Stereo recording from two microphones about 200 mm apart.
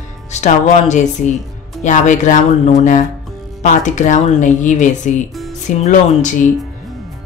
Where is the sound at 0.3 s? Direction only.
35° left (ahead or behind).